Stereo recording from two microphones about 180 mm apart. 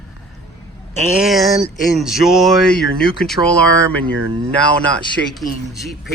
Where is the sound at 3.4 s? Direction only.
20° right (ahead or behind).